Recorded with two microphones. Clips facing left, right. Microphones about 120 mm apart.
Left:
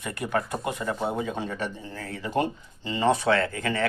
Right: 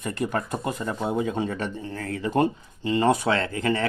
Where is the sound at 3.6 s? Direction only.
30° right (ahead or behind).